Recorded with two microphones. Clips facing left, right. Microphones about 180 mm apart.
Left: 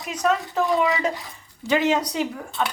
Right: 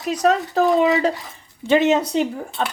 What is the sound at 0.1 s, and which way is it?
A woman's voice, 35° right (ahead or behind).